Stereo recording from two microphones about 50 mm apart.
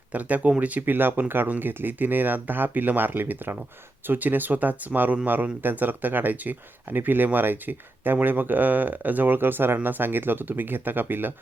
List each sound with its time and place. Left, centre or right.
0.1 s speech: right